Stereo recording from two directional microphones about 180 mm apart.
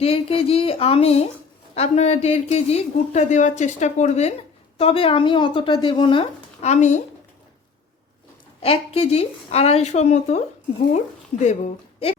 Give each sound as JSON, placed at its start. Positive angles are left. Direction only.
{"t": 0.0, "sound": "speech", "side_deg": 30}
{"t": 8.6, "sound": "speech", "side_deg": 35}